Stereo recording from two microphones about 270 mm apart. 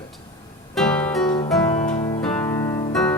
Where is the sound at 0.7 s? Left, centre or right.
Centre.